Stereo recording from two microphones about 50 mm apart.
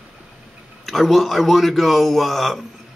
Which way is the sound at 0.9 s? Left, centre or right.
Centre.